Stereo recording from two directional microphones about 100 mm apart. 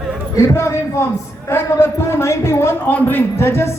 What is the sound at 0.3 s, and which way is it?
A man's voice, 25° left (ahead or behind).